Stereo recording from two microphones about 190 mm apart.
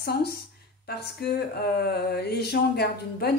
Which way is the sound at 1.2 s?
60° left (ahead or behind).